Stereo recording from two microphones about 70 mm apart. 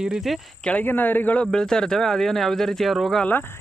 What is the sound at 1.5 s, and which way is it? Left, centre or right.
Speech, centre.